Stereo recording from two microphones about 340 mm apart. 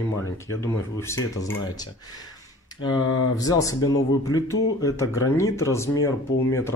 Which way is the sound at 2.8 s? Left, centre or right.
Centre.